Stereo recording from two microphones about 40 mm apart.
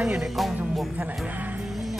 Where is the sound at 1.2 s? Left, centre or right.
Right.